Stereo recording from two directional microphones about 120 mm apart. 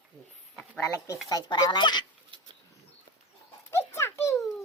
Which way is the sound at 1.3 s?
35° left (ahead or behind).